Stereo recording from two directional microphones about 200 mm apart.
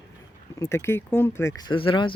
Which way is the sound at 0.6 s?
10° left (ahead or behind).